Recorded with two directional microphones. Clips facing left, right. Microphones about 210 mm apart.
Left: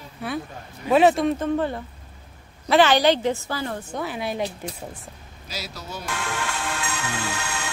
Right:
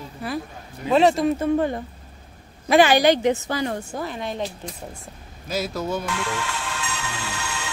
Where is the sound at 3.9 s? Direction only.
5° left (ahead or behind).